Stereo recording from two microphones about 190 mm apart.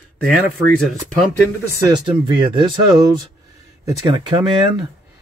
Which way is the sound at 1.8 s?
20° right (ahead or behind).